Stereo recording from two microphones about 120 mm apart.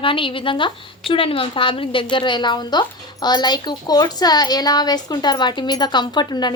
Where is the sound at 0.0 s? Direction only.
45° left (ahead or behind).